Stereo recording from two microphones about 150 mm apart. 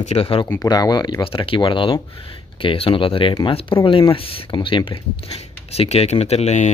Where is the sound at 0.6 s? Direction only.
25° left (ahead or behind).